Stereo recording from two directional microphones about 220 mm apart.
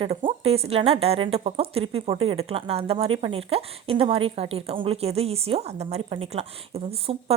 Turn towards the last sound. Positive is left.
turn(degrees=-25)  # may be behind; listen again after turning